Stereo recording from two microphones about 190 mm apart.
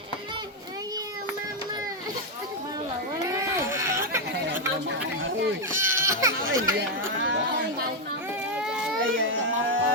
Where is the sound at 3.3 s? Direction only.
15° right (ahead or behind).